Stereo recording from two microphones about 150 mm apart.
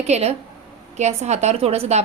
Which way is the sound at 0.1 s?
45° right (ahead or behind).